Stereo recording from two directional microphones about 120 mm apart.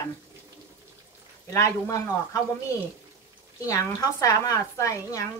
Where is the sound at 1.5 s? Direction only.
25° left (ahead or behind).